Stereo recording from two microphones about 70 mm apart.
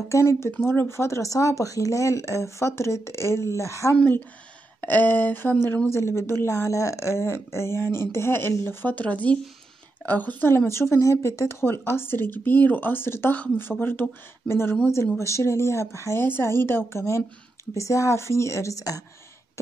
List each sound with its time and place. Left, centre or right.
0.1 s speech: left
3.9 s speech: left
5.9 s speech: left
10.7 s speech: left